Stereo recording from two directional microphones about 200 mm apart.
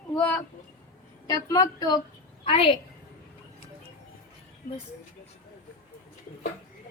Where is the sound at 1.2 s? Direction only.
20° left (ahead or behind).